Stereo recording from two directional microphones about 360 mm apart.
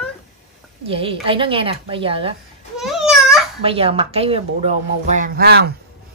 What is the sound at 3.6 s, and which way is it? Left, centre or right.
Speech, centre.